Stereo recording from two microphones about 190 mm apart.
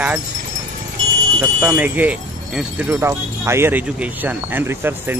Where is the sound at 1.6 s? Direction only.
5° right (ahead or behind).